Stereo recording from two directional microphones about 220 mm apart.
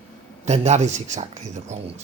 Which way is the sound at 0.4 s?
30° right (ahead or behind).